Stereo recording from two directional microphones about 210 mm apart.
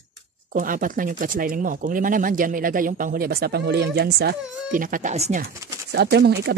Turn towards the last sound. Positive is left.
turn(degrees=-50)  # may be behind; listen again after turning